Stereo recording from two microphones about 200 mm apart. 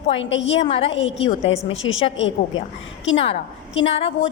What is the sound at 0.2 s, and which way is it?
Speech, 65° left (ahead or behind).